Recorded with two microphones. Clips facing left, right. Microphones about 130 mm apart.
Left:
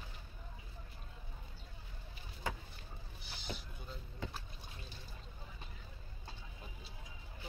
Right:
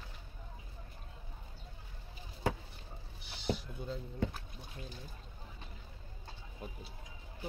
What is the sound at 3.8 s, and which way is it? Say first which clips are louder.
Speech: right 9 dB; 90° right.